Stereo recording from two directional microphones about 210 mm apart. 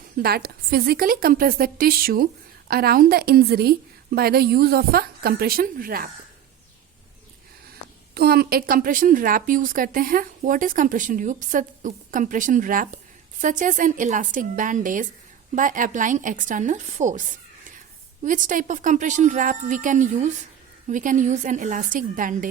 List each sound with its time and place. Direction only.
0.2 s a woman's voice: 45° right (ahead or behind)
8.1 s a woman's voice: 45° right (ahead or behind)